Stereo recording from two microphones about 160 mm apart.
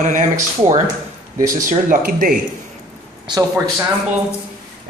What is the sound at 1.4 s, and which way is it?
Speech, 60° right (ahead or behind).